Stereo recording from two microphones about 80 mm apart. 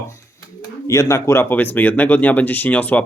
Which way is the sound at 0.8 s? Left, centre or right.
Left.